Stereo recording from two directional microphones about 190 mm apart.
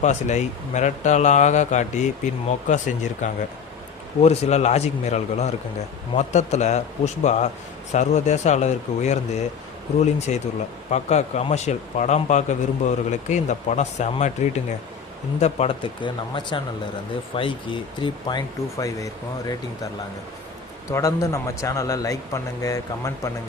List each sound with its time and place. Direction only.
0.0 s a man's voice: 40° left (ahead or behind)
15.4 s speech: 35° left (ahead or behind); by 19.9 s 15° left (ahead or behind)
20.9 s a man's voice: 15° left (ahead or behind)